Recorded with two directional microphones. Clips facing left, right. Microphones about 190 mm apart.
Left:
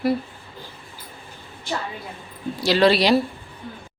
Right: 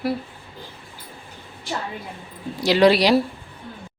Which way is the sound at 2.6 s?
15° right (ahead or behind).